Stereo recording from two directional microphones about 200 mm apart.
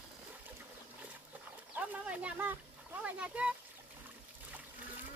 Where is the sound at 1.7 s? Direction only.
5° right (ahead or behind).